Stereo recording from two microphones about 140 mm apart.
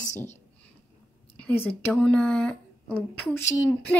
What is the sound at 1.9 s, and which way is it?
Speech, 5° left (ahead or behind).